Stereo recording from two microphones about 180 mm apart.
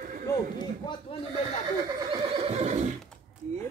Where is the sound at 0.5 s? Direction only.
25° left (ahead or behind).